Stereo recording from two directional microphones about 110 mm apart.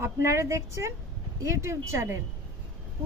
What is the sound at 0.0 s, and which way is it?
Speech, 25° right (ahead or behind).